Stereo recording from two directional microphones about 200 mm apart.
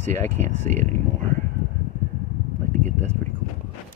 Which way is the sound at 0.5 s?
35° right (ahead or behind).